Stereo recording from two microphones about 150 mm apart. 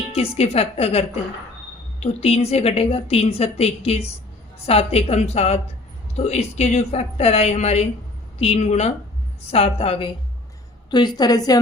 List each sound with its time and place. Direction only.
0.2 s a woman's voice: 45° left (ahead or behind)
10.9 s a woman's voice: 30° left (ahead or behind)